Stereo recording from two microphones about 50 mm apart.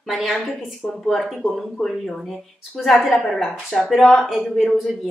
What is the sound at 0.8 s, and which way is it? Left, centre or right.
Speech, left.